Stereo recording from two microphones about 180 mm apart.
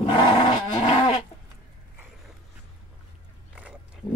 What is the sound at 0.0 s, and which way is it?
Dog, 30° left (ahead or behind).